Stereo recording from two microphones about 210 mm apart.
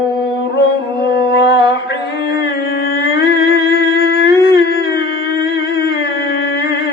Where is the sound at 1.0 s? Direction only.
55° left (ahead or behind).